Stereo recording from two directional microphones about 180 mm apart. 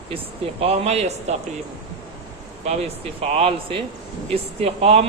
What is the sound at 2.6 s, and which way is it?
A man's voice, 35° right (ahead or behind).